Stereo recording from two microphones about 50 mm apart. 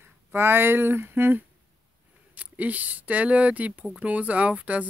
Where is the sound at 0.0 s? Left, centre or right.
Right.